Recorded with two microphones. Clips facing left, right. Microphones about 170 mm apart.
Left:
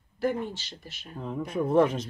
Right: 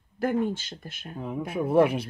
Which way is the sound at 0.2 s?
50° right (ahead or behind).